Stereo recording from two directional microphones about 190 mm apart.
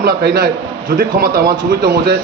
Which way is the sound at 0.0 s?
50° right (ahead or behind).